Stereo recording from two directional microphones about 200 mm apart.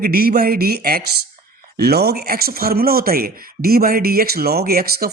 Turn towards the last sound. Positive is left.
turn(degrees=-50)  # may be behind; listen again after turning